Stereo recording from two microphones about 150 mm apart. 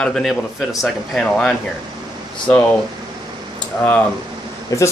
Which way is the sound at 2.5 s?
10° left (ahead or behind).